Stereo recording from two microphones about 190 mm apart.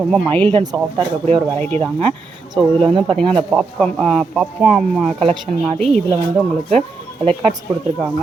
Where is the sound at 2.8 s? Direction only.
30° right (ahead or behind).